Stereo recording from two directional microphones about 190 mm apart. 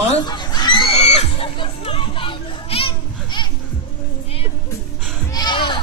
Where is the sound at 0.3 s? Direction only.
20° left (ahead or behind).